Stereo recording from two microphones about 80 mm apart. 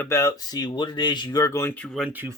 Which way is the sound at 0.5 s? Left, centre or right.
Left.